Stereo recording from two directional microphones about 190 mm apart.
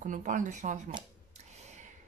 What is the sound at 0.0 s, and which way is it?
Speech, 40° right (ahead or behind).